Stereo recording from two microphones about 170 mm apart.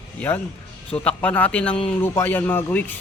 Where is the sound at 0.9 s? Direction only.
5° left (ahead or behind).